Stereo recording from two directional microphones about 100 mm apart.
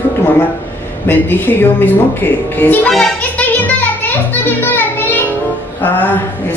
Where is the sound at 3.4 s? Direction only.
15° left (ahead or behind).